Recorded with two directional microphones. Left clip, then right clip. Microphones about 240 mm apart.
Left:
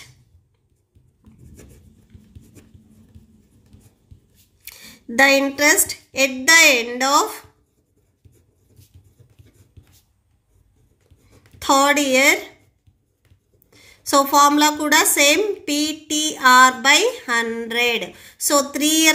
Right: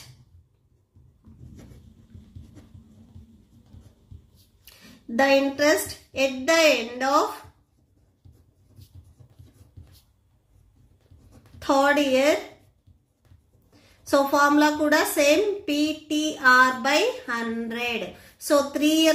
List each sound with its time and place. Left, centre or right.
4.6 s a woman's voice: left
11.6 s a woman's voice: left
13.7 s a woman's voice: left